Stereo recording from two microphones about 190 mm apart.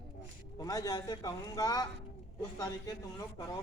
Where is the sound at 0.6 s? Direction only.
20° left (ahead or behind).